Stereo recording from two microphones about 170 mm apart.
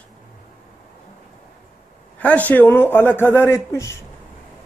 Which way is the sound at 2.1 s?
10° left (ahead or behind).